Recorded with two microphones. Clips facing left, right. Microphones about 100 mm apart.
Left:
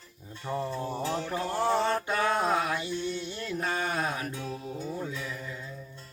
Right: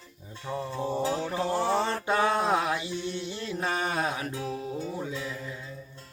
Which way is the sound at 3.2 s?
25° right (ahead or behind).